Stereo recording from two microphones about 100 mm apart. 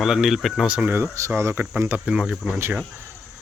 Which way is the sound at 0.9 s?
25° right (ahead or behind).